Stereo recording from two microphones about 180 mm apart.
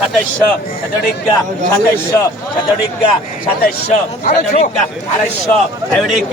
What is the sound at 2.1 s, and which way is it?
Speech, 15° left (ahead or behind).